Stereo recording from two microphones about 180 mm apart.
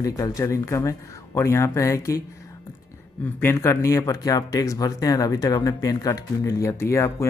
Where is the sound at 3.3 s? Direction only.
15° left (ahead or behind).